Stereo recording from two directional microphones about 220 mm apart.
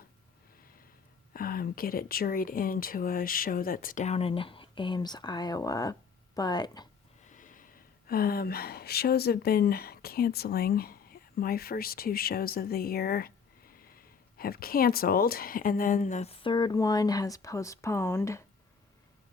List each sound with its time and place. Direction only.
1.3 s speech: 40° left (ahead or behind); by 6.8 s 20° left (ahead or behind)
7.3 s speech: 35° left (ahead or behind); by 18.4 s 10° left (ahead or behind)